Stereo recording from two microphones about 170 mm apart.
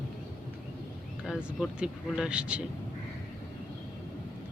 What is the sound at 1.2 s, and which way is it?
Speech, centre (ahead or behind).